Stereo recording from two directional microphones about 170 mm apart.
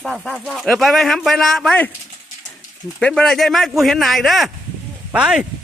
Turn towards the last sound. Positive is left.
turn(degrees=-5)  # may be behind; listen again after turning